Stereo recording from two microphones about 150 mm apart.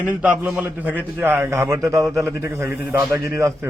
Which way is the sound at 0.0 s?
10° right (ahead or behind).